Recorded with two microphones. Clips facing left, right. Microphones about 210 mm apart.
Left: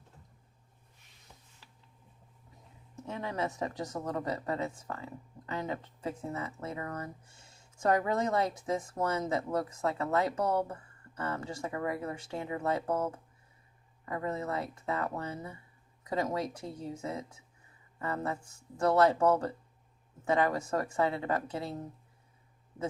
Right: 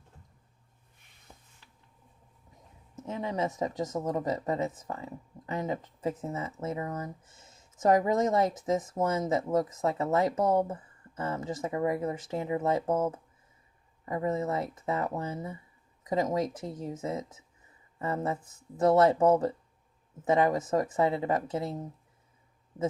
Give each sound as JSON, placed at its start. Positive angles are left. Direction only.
{"t": 3.1, "sound": "speech", "side_deg": -20}